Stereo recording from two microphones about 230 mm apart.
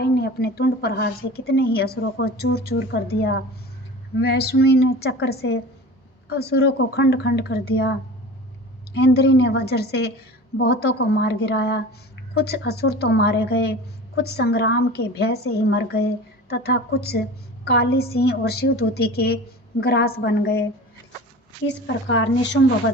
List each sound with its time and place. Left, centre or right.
0.0 s a woman's voice: left
22.1 s a woman's voice: left